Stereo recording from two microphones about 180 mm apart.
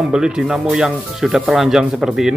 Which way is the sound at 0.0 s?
5° right (ahead or behind).